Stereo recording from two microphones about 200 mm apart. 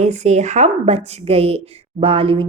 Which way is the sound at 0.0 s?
35° right (ahead or behind).